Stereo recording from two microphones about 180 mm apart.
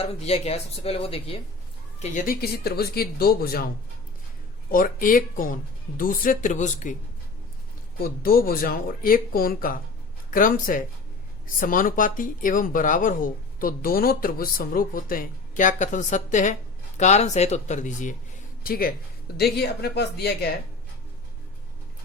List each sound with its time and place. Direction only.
0.0 s speech: 35° left (ahead or behind)
2.0 s speech: 40° left (ahead or behind); by 3.7 s 55° left (ahead or behind)
4.7 s speech: 50° left (ahead or behind)
7.9 s speech: 55° left (ahead or behind)
18.6 s speech: 55° left (ahead or behind)